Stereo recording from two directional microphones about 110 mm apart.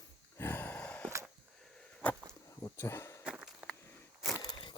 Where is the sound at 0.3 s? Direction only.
20° left (ahead or behind).